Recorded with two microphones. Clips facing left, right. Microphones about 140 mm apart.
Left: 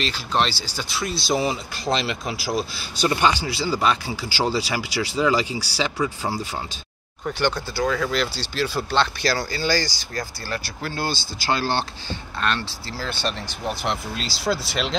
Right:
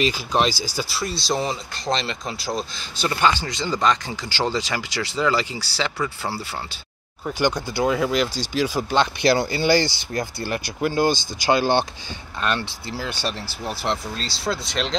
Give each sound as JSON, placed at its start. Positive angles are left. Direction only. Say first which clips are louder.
{"t": 0.0, "sound": "speech", "louder": "right 3 dB", "side_deg": -10}
{"t": 7.2, "sound": "speech", "louder": "right 1 dB", "side_deg": -10}
{"t": 13.7, "sound": "speech", "louder": "even", "side_deg": 0}